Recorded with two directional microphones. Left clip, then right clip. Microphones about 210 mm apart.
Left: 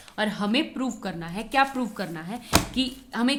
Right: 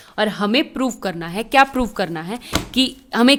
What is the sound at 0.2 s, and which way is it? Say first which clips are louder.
A woman's voice: right 7 dB; 40° right (ahead or behind).